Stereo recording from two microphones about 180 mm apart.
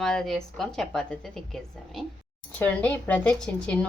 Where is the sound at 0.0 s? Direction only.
5° left (ahead or behind).